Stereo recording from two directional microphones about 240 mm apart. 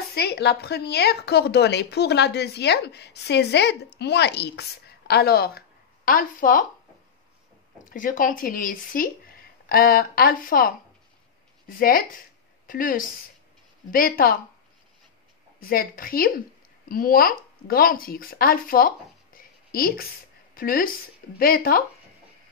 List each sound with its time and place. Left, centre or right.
0.1 s speech: left
7.9 s speech: left
15.6 s a woman's voice: left